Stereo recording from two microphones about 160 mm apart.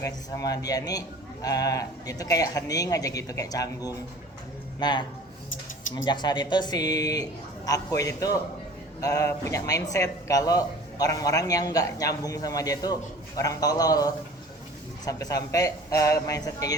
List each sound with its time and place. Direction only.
0.0 s speech: 20° left (ahead or behind)
6.1 s speech: 25° left (ahead or behind)